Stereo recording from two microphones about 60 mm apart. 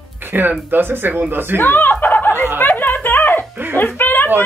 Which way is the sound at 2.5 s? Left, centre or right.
Left.